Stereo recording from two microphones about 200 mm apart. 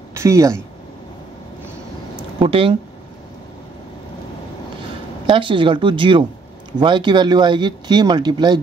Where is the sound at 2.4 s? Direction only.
25° right (ahead or behind).